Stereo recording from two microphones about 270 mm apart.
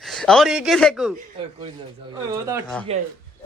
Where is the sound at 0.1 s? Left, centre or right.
Centre.